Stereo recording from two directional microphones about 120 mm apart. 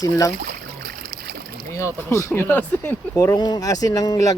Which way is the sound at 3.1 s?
30° left (ahead or behind).